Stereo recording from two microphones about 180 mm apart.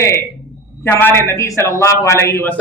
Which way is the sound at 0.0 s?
15° left (ahead or behind).